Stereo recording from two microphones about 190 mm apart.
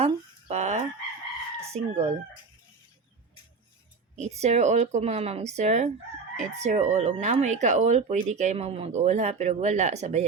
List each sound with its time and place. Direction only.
0.0 s a sound: 35° right (ahead or behind)
1.7 s speech: 35° right (ahead or behind)
4.1 s speech: 35° right (ahead or behind)